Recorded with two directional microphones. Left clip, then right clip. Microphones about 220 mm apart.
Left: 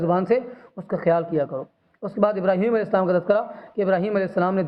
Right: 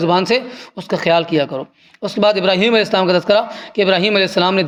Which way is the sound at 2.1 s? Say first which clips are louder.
Right 7 dB; 55° right (ahead or behind).